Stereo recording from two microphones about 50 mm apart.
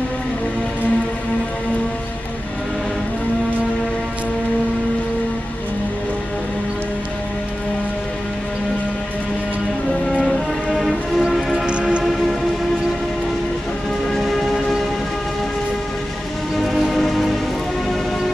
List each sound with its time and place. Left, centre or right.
10.2 s music: centre
11.5 s train: centre
14.1 s train: centre
16.5 s music: centre